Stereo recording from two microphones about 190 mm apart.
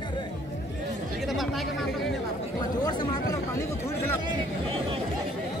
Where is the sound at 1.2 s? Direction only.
Centre (ahead or behind).